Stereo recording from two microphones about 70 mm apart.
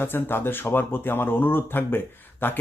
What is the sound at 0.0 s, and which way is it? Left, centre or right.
Speech, left.